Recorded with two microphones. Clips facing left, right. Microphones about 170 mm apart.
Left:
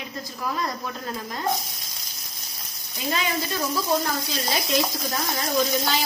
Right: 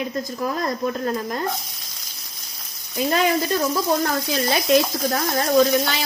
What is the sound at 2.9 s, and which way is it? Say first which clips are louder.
Speech: right 8 dB; 55° right (ahead or behind).